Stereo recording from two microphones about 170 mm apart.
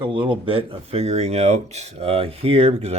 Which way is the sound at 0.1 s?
30° right (ahead or behind).